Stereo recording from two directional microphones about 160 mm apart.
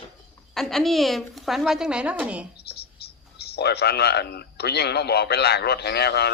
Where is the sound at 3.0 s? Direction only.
85° left.